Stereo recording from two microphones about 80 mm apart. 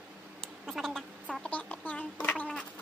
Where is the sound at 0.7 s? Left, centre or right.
Centre.